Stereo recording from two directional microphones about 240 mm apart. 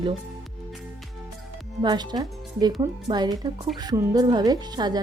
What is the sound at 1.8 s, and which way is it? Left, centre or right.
Speech, centre.